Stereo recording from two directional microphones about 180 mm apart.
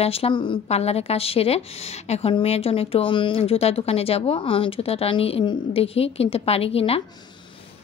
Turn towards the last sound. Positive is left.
turn(degrees=35)  # may be behind; listen again after turning